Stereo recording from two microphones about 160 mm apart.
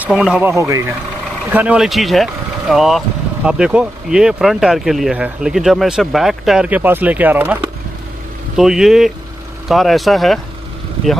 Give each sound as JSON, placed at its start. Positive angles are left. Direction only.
{"t": 0.0, "sound": "speech", "side_deg": -5}
{"t": 0.5, "sound": "speech", "side_deg": -20}
{"t": 1.5, "sound": "speech", "side_deg": -10}
{"t": 8.5, "sound": "speech", "side_deg": -5}